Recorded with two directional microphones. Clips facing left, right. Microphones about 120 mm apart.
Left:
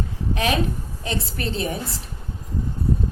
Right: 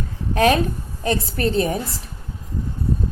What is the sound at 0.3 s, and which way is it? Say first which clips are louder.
A woman's voice: right 7 dB; 45° right (ahead or behind).